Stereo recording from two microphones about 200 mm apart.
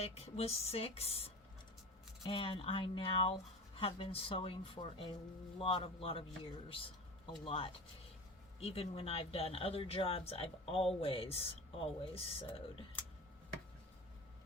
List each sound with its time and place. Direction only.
0.0 s speech: 30° left (ahead or behind)